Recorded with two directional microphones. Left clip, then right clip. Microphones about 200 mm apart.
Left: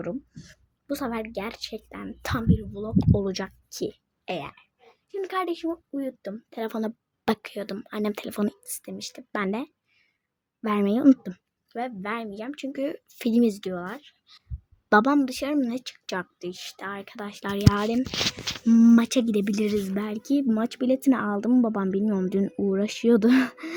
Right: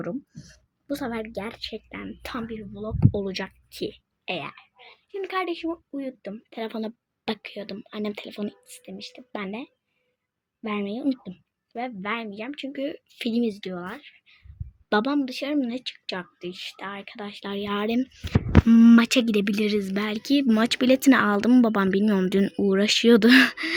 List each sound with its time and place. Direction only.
0.0 s speech: centre (ahead or behind)
2.2 s speech: 25° left (ahead or behind)
2.7 s speech: 10° left (ahead or behind)
11.2 s a sound: 20° left (ahead or behind)
11.8 s speech: 10° left (ahead or behind)
18.9 s speech: 10° left (ahead or behind)